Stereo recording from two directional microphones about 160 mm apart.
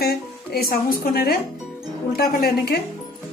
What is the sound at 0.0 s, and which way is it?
Speech, 75° left (ahead or behind).